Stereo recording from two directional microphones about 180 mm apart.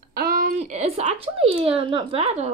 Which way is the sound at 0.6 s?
35° right (ahead or behind).